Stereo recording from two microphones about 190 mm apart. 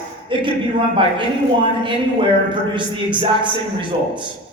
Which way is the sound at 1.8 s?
25° right (ahead or behind).